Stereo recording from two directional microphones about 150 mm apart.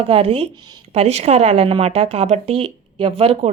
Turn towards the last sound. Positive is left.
turn(degrees=-40)  # may be behind; listen again after turning